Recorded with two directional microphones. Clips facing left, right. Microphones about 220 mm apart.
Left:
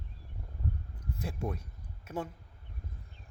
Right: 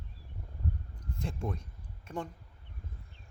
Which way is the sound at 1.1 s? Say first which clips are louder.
Even; 5° left (ahead or behind).